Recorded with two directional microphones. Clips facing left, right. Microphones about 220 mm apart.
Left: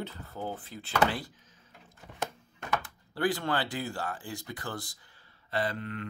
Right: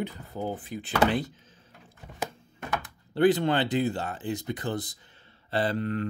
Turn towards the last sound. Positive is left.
turn(degrees=-35)  # may be behind; listen again after turning